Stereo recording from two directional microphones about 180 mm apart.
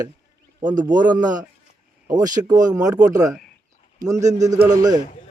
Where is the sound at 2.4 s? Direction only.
20° right (ahead or behind).